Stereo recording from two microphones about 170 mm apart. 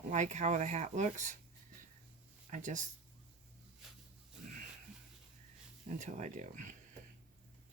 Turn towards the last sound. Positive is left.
turn(degrees=-45)  # may be behind; listen again after turning